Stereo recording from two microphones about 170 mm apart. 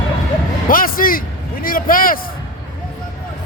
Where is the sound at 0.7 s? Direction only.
55° left (ahead or behind).